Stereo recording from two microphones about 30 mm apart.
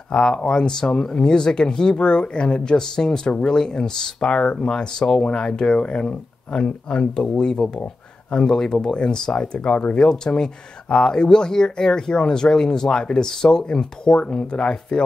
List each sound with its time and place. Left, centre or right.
0.1 s speech: left